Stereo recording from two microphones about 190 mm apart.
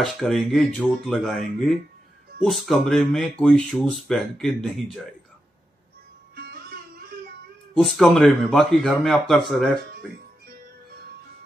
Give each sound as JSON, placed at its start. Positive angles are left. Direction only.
{"t": 0.0, "sound": "speech", "side_deg": 0}
{"t": 6.3, "sound": "music", "side_deg": -60}
{"t": 7.7, "sound": "speech", "side_deg": 0}